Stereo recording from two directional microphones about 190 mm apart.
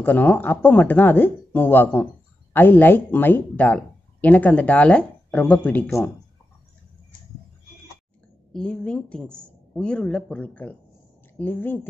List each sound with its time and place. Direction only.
0.0 s speech: 10° left (ahead or behind)
8.5 s speech: 5° left (ahead or behind)